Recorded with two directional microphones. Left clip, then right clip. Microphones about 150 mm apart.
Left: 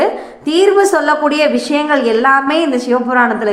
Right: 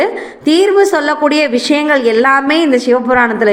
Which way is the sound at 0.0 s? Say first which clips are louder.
Right 1 dB; 35° right (ahead or behind).